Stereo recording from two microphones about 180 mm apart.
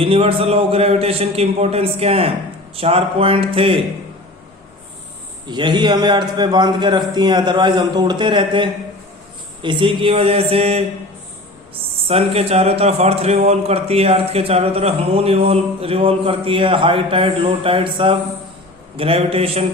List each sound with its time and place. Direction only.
0.0 s a man's voice: 30° right (ahead or behind)
5.5 s a man's voice: 25° right (ahead or behind)
12.0 s a man's voice: 35° right (ahead or behind)